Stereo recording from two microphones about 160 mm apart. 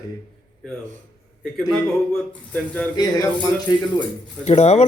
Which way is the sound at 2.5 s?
5° left (ahead or behind).